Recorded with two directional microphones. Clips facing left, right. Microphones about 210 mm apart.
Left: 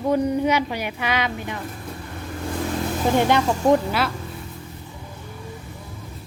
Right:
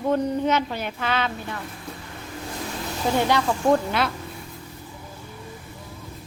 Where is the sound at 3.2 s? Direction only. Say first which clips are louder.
Left 2 dB; 20° left (ahead or behind).